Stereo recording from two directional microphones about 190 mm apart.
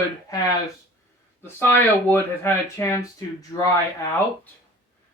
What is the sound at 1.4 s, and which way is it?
Speech, 10° left (ahead or behind).